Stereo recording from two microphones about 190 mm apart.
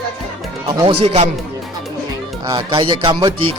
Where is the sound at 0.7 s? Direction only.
30° right (ahead or behind).